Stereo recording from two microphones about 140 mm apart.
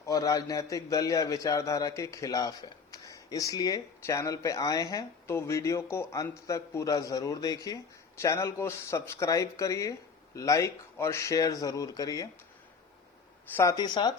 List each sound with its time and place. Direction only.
0.0 s a man's voice: 25° left (ahead or behind)
13.6 s a man's voice: 25° left (ahead or behind)